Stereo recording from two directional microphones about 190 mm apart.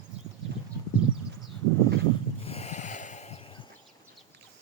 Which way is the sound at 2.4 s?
35° left (ahead or behind).